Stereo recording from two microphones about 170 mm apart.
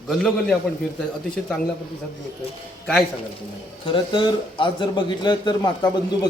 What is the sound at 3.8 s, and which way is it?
A man's voice, 30° left (ahead or behind).